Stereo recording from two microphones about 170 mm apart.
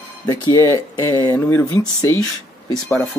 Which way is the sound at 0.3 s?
20° left (ahead or behind).